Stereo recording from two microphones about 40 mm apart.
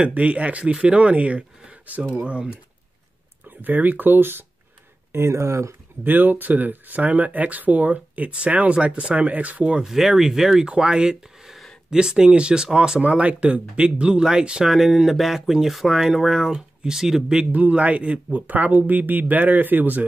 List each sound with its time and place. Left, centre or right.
0.0 s speech: right
2.2 s speech: right
3.4 s speech: right
5.1 s speech: right
6.0 s speech: right
9.8 s speech: centre
10.7 s speech: right
13.1 s speech: right
14.7 s speech: centre
17.5 s speech: right
18.3 s speech: right